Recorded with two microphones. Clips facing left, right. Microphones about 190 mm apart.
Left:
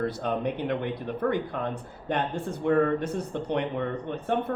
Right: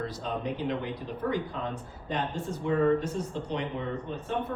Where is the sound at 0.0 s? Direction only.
60° left (ahead or behind).